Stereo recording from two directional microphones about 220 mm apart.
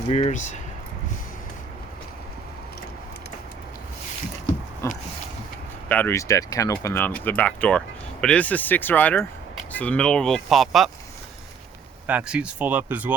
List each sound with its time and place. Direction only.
0.1 s speech: 30° left (ahead or behind)
4.8 s speech: 15° left (ahead or behind)
12.0 s speech: 5° right (ahead or behind)